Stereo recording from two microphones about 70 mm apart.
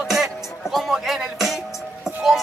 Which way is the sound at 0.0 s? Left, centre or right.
Centre.